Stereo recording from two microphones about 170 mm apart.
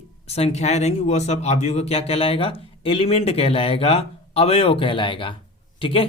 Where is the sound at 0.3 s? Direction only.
40° left (ahead or behind).